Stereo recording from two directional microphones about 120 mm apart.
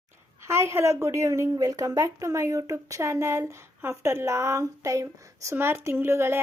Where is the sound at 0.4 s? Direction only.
25° right (ahead or behind).